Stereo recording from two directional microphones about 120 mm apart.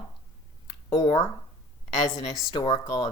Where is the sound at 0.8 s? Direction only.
40° left (ahead or behind).